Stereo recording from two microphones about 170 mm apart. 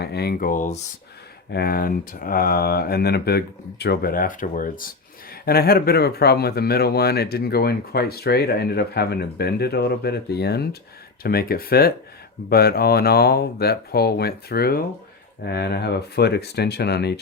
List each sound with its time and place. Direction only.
0.0 s speech: 70° left (ahead or behind); by 0.8 s 50° left (ahead or behind)
1.5 s speech: 65° left (ahead or behind)